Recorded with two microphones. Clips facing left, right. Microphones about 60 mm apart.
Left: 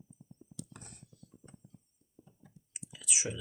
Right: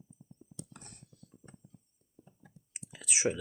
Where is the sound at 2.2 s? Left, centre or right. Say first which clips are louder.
Right 1 dB; right.